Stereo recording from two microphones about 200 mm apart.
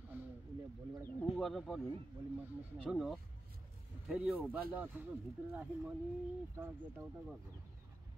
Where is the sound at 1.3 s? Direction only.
Centre (ahead or behind).